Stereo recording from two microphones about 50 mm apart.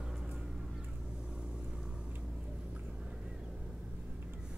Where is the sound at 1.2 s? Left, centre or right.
Centre.